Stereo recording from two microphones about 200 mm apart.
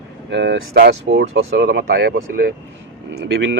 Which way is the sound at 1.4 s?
55° right (ahead or behind).